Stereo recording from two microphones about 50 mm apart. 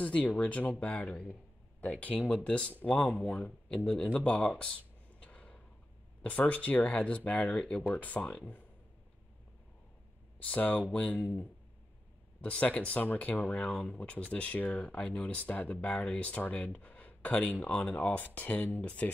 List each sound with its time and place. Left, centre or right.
0.0 s speech: left
3.3 s speech: left
5.2 s a sound: left
6.2 s speech: left
7.9 s speech: left
10.4 s speech: left